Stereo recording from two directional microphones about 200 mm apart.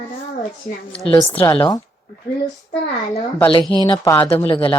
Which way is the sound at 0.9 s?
25° left (ahead or behind).